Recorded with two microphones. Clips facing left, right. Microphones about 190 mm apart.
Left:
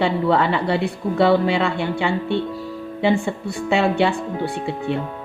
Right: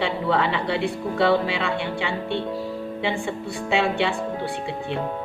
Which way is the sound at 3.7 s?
45° left (ahead or behind).